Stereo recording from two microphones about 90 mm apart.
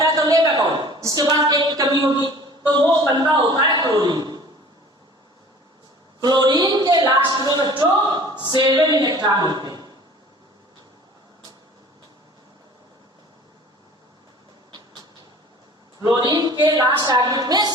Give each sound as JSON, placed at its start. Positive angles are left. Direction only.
{"t": 0.0, "sound": "a sound", "side_deg": -45}
{"t": 1.0, "sound": "a man's voice", "side_deg": -45}
{"t": 6.1, "sound": "speech", "side_deg": -50}
{"t": 16.1, "sound": "a woman's voice", "side_deg": -45}